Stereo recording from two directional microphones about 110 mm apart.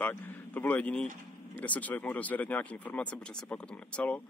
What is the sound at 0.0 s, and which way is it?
Speech, 20° left (ahead or behind).